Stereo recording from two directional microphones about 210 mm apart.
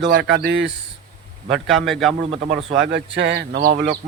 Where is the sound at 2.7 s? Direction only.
60° right (ahead or behind).